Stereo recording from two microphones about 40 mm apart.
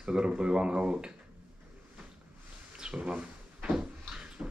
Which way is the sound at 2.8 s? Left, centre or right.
Right.